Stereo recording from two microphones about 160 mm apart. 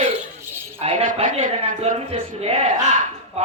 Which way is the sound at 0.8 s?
40° right (ahead or behind).